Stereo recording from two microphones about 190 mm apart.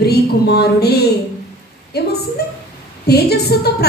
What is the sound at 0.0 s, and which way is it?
A woman's voice, 55° left (ahead or behind).